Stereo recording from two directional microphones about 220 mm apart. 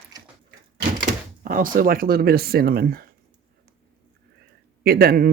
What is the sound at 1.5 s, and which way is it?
Speech, 40° right (ahead or behind).